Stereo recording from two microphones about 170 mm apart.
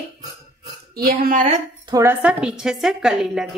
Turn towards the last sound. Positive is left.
turn(degrees=-5)  # may be behind; listen again after turning